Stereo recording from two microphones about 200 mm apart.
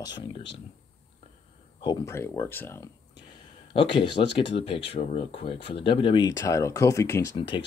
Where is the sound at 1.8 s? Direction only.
15° left (ahead or behind).